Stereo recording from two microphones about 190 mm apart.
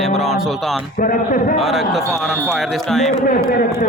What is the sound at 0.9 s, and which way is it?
Speech, 45° left (ahead or behind).